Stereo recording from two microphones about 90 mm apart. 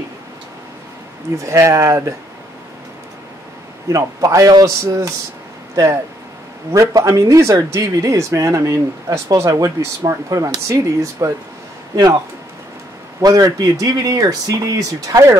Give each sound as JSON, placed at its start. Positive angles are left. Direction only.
{"t": 1.4, "sound": "speech", "side_deg": -35}
{"t": 3.9, "sound": "speech", "side_deg": -35}
{"t": 6.7, "sound": "speech", "side_deg": -35}
{"t": 13.2, "sound": "speech", "side_deg": -45}